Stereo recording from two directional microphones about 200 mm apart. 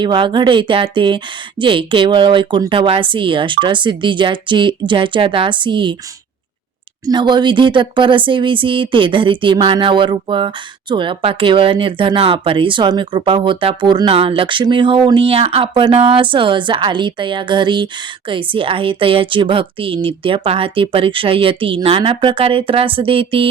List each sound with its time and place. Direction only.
0.0 s speech: 25° right (ahead or behind)
7.0 s speech: 20° right (ahead or behind)